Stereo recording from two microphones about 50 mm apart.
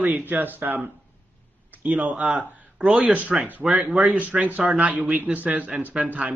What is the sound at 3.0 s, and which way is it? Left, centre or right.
A man's voice, right.